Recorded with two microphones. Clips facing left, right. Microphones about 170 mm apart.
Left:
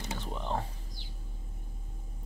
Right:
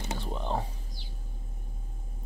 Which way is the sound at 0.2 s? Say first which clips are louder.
Right 3 dB; 20° right (ahead or behind).